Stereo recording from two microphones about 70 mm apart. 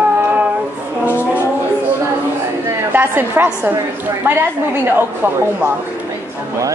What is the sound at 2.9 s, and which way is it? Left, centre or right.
A woman's voice, right.